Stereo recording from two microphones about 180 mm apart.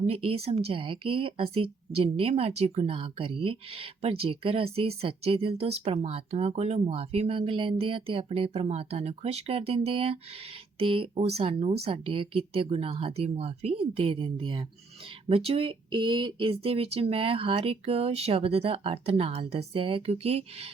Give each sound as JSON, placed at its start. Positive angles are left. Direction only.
{"t": 0.1, "sound": "speech", "side_deg": -35}